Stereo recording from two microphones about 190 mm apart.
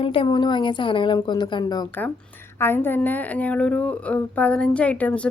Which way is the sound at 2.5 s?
10° left (ahead or behind).